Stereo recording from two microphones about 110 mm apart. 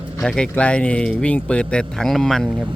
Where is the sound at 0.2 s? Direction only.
10° left (ahead or behind).